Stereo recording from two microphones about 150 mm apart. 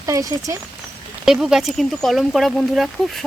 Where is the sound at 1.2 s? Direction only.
5° right (ahead or behind).